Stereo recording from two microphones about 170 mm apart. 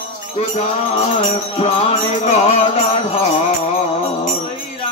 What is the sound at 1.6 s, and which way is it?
Music, 40° left (ahead or behind).